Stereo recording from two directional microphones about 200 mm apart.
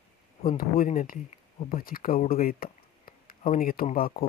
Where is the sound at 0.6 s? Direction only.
45° left (ahead or behind).